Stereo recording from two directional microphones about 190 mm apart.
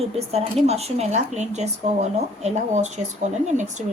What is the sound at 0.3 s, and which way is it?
Speech, 35° right (ahead or behind).